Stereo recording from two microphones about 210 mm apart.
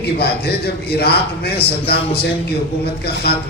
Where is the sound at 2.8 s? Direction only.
50° left (ahead or behind).